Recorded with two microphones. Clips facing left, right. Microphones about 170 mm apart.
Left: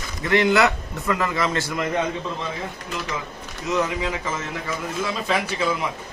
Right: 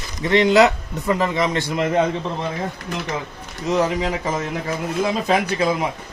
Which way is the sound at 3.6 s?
35° right (ahead or behind).